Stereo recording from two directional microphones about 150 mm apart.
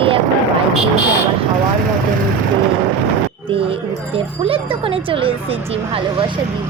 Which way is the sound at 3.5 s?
40° right (ahead or behind).